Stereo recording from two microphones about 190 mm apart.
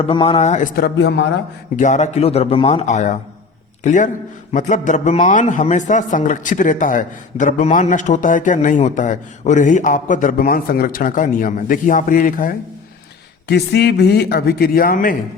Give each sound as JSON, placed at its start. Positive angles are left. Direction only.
{"t": 0.0, "sound": "speech", "side_deg": 30}
{"t": 0.9, "sound": "a man's voice", "side_deg": 65}
{"t": 1.7, "sound": "a man's voice", "side_deg": 40}
{"t": 13.5, "sound": "a man's voice", "side_deg": 60}